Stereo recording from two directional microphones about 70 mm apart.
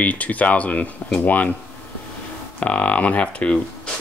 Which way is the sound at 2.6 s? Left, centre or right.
Centre.